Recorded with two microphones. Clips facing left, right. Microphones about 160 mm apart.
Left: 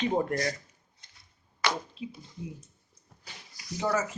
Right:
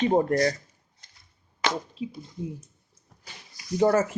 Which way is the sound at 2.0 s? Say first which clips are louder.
Right 5 dB; 35° right (ahead or behind).